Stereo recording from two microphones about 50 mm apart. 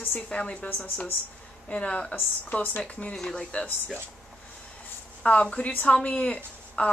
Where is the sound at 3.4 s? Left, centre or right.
Left.